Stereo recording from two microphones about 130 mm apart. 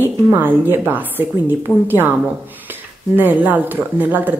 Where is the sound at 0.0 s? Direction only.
15° right (ahead or behind).